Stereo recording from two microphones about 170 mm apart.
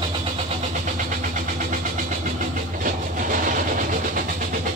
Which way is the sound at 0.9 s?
50° right (ahead or behind).